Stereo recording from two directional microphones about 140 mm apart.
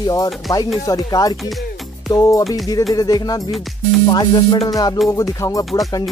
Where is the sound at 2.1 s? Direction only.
25° left (ahead or behind).